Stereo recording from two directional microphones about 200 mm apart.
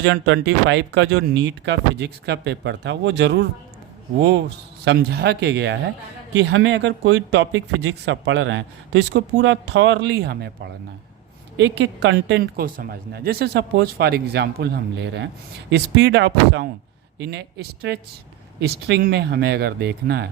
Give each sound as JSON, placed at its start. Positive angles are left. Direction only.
{"t": 0.0, "sound": "speech", "side_deg": -60}